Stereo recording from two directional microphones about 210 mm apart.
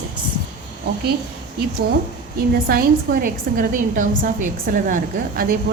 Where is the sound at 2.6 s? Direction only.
45° right (ahead or behind).